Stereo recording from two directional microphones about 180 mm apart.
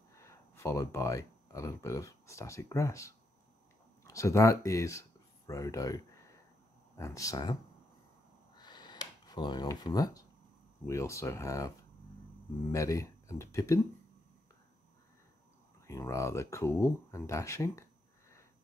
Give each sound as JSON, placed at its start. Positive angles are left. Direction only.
{"t": 0.1, "sound": "speech", "side_deg": 15}
{"t": 8.5, "sound": "a sound", "side_deg": 25}
{"t": 10.9, "sound": "speech", "side_deg": 15}
{"t": 12.7, "sound": "speech", "side_deg": 15}
{"t": 15.9, "sound": "speech", "side_deg": 15}